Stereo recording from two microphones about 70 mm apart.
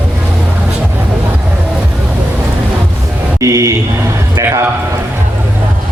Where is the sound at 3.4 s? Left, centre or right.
Right.